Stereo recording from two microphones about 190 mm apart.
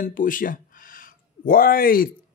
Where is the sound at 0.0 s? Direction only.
45° left (ahead or behind).